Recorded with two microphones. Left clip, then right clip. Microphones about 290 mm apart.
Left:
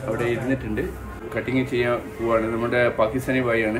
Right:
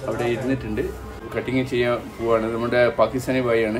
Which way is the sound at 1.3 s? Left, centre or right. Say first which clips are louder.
Right 1 dB; centre.